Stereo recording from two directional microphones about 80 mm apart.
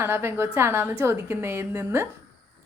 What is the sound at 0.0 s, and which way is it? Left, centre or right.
A woman's voice, right.